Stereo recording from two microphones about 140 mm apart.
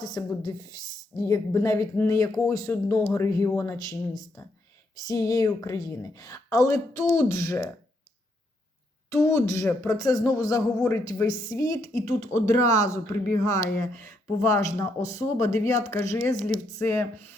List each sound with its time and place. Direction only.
0.0 s speech: 25° left (ahead or behind)
9.0 s speech: 20° left (ahead or behind)